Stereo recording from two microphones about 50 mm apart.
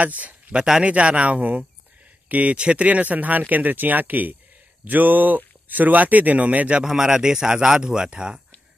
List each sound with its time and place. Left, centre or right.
0.0 s speech: right
6.8 s speech: centre